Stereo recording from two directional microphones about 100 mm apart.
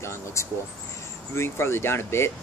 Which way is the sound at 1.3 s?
25° left (ahead or behind).